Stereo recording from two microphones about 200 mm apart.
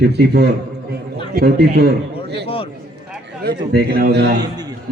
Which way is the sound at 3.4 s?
50° right (ahead or behind).